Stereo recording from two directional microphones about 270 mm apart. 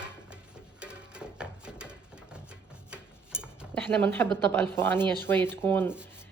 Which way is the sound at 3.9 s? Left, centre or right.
Centre.